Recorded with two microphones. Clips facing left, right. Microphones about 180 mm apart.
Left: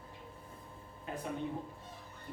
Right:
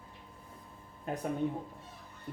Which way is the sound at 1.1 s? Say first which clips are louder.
Right 5 dB; 45° right (ahead or behind).